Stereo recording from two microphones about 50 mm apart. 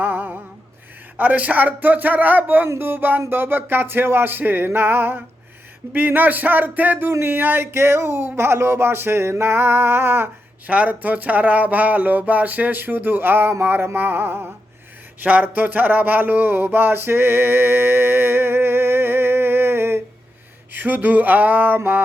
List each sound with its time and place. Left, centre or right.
0.0 s a sound: right
1.1 s speech: right
2.6 s music: right
5.9 s speech: right
7.3 s music: right
10.7 s speech: right
15.2 s a sound: right
20.7 s speech: right